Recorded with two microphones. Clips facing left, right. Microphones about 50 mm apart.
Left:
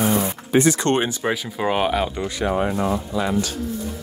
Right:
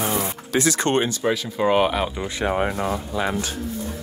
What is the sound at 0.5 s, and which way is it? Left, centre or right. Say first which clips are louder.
Speech: left 4 dB; right.